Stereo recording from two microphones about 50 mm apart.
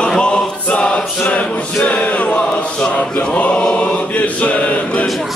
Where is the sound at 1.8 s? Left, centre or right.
Left.